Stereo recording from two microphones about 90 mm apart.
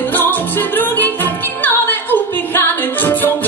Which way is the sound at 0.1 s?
20° left (ahead or behind).